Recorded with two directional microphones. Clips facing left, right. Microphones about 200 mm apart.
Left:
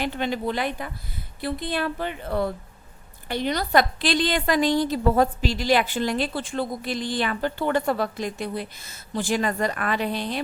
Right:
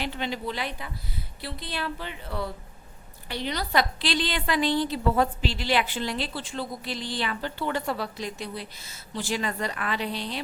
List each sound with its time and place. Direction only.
0.0 s a woman's voice: 50° left (ahead or behind)